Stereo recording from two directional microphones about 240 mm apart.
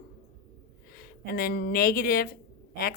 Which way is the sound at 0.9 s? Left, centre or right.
Left.